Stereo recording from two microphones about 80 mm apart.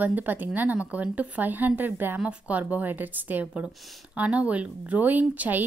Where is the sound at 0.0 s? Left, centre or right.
Right.